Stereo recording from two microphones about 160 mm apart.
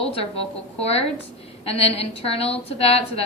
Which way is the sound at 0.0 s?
35° left (ahead or behind).